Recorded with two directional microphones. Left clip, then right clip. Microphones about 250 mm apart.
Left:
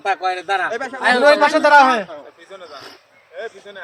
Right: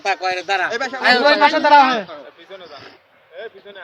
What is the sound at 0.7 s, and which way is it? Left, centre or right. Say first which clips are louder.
Speech: right 2 dB; centre.